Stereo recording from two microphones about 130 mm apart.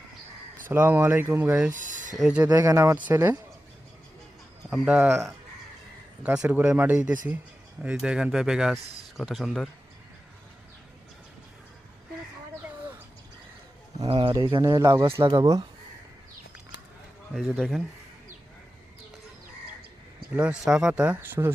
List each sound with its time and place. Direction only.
0.7 s speech: 15° right (ahead or behind)
1.7 s a sound: 80° right
2.1 s speech: 5° right (ahead or behind)
2.5 s speech: 25° right (ahead or behind)
4.7 s speech: 10° right (ahead or behind)
6.2 s speech: 10° right (ahead or behind)
14.1 s speech: 45° right (ahead or behind)
14.3 s speech: 35° right (ahead or behind)
14.9 s speech: 20° right (ahead or behind)
17.3 s speech: centre (ahead or behind)
20.3 s speech: 10° right (ahead or behind)